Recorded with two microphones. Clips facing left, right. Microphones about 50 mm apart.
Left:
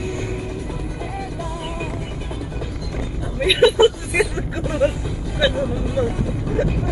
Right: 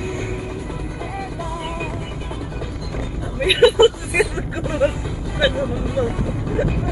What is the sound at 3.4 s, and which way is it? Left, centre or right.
Hubbub, centre.